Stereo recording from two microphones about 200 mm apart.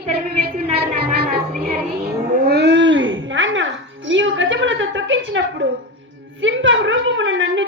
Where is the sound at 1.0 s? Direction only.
50° right (ahead or behind).